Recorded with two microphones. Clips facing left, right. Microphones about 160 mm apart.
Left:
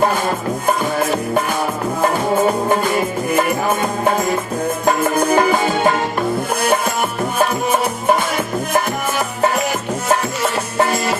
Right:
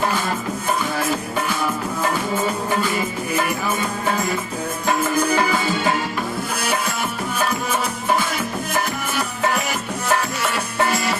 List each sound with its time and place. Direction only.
5.3 s music: 55° left (ahead or behind)